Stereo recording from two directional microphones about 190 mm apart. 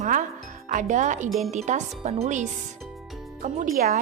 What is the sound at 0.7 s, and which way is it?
A woman's voice, 40° right (ahead or behind).